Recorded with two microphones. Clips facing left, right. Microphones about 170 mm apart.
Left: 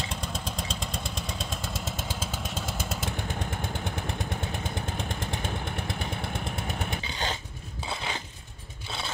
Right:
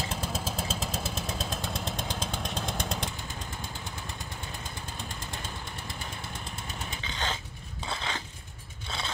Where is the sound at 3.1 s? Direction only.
60° left (ahead or behind).